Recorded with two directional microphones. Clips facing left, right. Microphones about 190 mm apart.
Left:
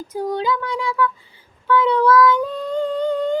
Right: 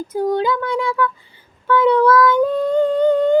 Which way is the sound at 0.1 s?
50° right (ahead or behind).